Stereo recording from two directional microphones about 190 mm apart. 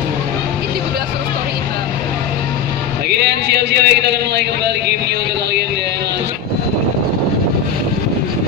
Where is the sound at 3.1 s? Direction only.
60° right (ahead or behind).